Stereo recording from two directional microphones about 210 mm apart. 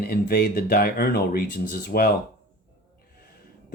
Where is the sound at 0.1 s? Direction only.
45° left (ahead or behind).